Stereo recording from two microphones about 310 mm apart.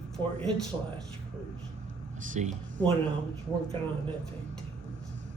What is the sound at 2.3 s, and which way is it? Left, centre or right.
Speech, right.